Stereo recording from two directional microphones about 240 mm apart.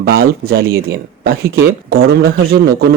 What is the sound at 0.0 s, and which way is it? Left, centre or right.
Speech, right.